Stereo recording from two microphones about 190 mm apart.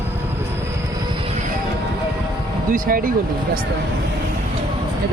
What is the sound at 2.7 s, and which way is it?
Speech, 45° right (ahead or behind).